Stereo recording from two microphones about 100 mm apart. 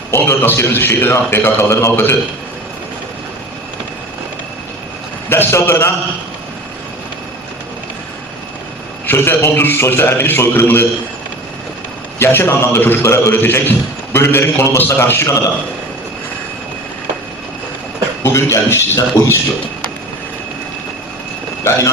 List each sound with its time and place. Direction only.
0.1 s a man's voice: 25° left (ahead or behind)
5.3 s a man's voice: 25° left (ahead or behind)
9.0 s a man's voice: 25° left (ahead or behind)
12.2 s a man's voice: 25° left (ahead or behind)
18.2 s a man's voice: 25° left (ahead or behind)
21.6 s speech: 30° left (ahead or behind)